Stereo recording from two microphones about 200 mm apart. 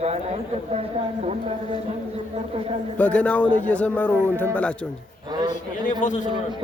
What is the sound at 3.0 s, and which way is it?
Speech, 5° left (ahead or behind).